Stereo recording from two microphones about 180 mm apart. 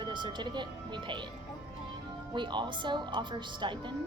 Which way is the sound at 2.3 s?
25° right (ahead or behind).